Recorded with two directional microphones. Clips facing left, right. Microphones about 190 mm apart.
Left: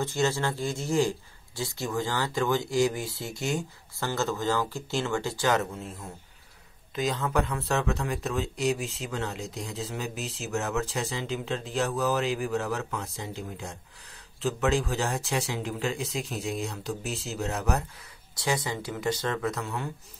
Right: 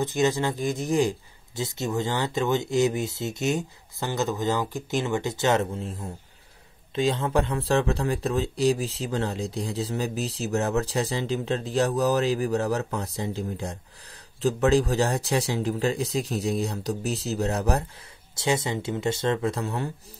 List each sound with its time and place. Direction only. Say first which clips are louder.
0.0 s speech: right 3 dB; 15° right (ahead or behind); by 17.8 s 35° right (ahead or behind)
18.3 s speech: right 4 dB; 25° right (ahead or behind)